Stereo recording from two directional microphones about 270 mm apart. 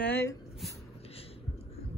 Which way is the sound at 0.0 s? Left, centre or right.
Centre.